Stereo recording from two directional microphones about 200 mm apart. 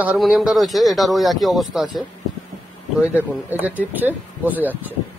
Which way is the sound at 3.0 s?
10° right (ahead or behind).